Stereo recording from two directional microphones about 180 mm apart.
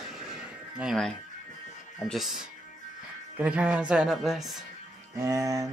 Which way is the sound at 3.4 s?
5° right (ahead or behind).